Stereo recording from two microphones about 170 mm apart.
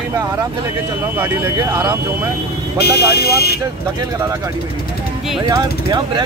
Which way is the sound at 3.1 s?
65° left (ahead or behind).